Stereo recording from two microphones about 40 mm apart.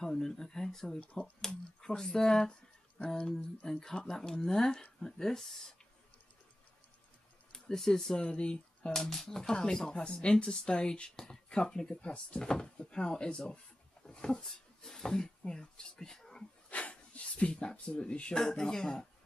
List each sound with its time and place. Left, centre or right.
0.0 s speech: centre
3.2 s speech: left
3.8 s speech: centre
7.5 s speech: centre
8.2 s speech: left
8.9 s speech: centre
11.9 s speech: left
14.0 s a sound: centre
15.0 s speech: centre
16.7 s a sound: left
17.6 s speech: left